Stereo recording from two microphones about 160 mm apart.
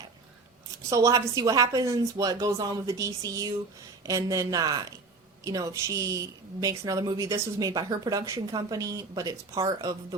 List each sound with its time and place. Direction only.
0.9 s a woman's voice: 20° right (ahead or behind)